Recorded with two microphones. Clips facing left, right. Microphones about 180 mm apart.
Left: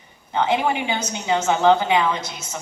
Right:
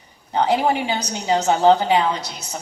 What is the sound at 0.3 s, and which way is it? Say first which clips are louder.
A woman's voice: right 2 dB; 35° right (ahead or behind).